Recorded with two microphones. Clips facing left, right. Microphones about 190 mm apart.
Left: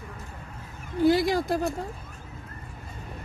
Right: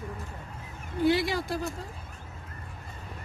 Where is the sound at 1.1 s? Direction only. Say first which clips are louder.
Left 4 dB; 45° left (ahead or behind).